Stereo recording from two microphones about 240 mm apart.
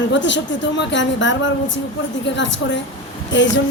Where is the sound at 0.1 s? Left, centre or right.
Left.